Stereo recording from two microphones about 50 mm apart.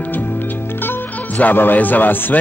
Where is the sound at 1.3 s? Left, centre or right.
Left.